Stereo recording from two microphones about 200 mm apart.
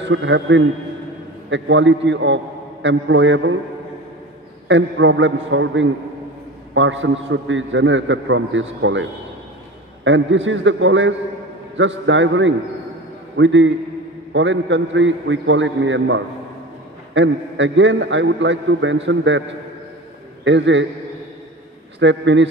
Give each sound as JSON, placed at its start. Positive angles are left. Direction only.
{"t": 0.0, "sound": "a man's voice", "side_deg": -65}
{"t": 4.6, "sound": "a man's voice", "side_deg": -70}
{"t": 10.0, "sound": "a man's voice", "side_deg": -70}
{"t": 20.4, "sound": "a man's voice", "side_deg": -65}
{"t": 22.0, "sound": "a man's voice", "side_deg": -65}